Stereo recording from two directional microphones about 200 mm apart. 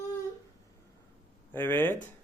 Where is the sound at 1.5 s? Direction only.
10° left (ahead or behind).